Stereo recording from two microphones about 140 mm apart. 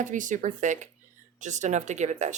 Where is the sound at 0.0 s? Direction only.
65° right (ahead or behind).